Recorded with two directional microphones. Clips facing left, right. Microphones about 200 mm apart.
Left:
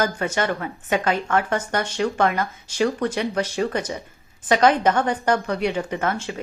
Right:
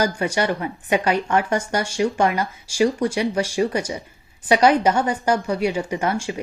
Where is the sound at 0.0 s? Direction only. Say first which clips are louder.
Right 2 dB; 15° right (ahead or behind).